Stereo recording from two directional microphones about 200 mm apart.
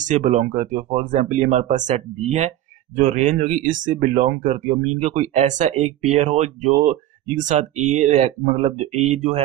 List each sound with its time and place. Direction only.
0.0 s speech: 40° right (ahead or behind)
3.0 s speech: 40° right (ahead or behind)